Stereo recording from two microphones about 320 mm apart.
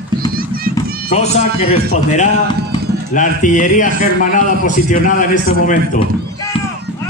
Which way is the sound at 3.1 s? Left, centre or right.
Left.